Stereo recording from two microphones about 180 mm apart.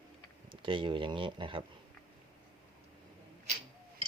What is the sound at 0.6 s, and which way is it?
Speech, 25° right (ahead or behind).